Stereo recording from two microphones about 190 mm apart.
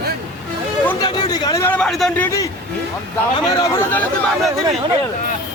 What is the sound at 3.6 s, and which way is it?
Speech, 15° left (ahead or behind).